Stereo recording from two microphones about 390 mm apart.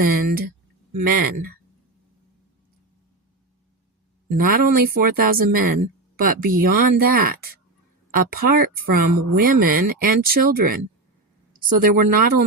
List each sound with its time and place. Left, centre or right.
0.0 s speech: right
4.4 s speech: right
8.1 s speech: right
11.8 s speech: right